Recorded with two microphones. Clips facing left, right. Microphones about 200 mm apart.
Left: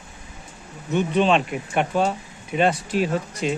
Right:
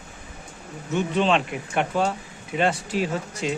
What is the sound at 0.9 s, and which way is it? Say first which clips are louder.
Speech: left 2 dB; 15° left (ahead or behind).